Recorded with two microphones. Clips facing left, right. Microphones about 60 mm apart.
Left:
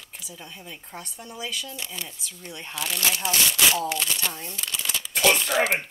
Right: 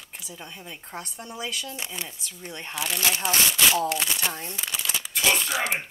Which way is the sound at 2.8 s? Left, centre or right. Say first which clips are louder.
Even; centre.